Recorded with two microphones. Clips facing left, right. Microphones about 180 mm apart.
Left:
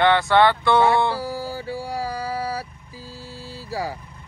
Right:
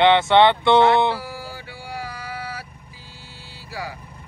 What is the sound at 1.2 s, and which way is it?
Mantra, 35° left (ahead or behind).